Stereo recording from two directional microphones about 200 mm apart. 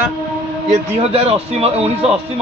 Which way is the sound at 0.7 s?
30° right (ahead or behind).